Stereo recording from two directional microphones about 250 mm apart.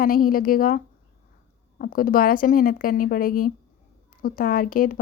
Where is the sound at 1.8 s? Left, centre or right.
Left.